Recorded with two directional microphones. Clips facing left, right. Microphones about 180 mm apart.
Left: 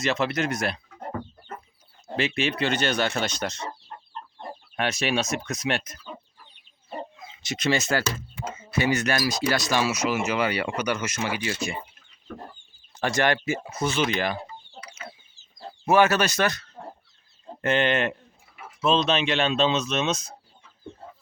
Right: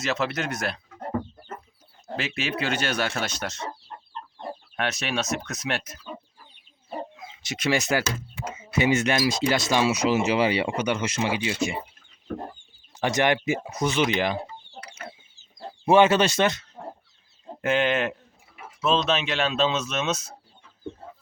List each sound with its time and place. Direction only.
0.0 s speech: centre (ahead or behind)
2.1 s speech: centre (ahead or behind)
4.8 s speech: centre (ahead or behind)
7.4 s speech: 10° right (ahead or behind)
13.0 s speech: 20° right (ahead or behind)
15.9 s speech: 25° right (ahead or behind)
16.8 s bird: 5° right (ahead or behind)
17.6 s speech: 5° right (ahead or behind)